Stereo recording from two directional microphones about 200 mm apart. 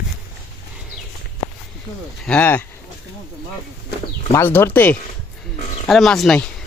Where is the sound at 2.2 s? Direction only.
5° left (ahead or behind).